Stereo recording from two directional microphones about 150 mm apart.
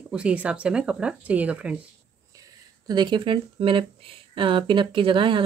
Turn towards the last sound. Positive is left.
turn(degrees=-35)  # may be behind; listen again after turning